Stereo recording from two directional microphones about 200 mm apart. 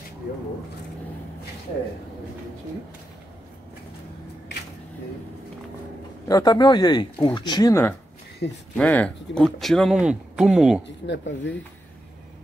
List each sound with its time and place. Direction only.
6.2 s speech: 20° left (ahead or behind)
8.4 s speech: 55° left (ahead or behind)
8.7 s speech: 5° left (ahead or behind)
11.1 s speech: 60° left (ahead or behind)